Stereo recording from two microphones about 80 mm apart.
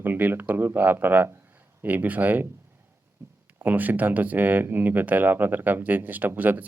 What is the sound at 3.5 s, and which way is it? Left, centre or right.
Speech, right.